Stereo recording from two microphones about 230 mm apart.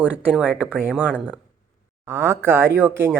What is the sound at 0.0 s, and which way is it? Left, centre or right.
Speech, centre.